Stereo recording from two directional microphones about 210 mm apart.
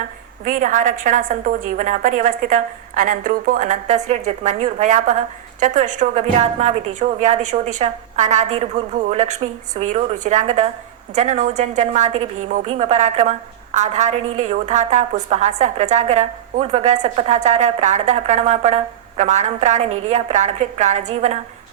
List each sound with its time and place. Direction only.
0.4 s a woman's voice: 40° right (ahead or behind)